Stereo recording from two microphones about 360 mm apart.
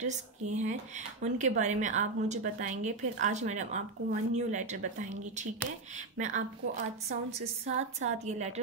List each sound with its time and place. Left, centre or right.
0.0 s speech: centre